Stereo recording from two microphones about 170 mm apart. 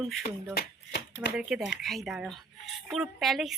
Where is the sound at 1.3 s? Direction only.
5° right (ahead or behind).